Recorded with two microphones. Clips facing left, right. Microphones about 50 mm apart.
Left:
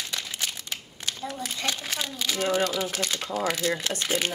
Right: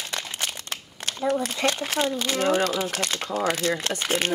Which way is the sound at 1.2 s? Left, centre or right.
Right.